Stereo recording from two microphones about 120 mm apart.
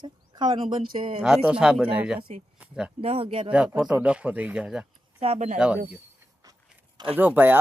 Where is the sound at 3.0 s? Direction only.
50° right (ahead or behind).